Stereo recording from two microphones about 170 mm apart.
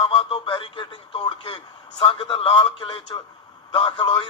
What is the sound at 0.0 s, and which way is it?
Speech, 30° left (ahead or behind).